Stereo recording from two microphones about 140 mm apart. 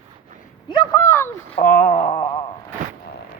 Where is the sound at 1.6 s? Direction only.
75° left (ahead or behind).